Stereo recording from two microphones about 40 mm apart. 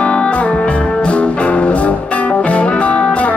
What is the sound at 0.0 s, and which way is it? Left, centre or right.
Music, left.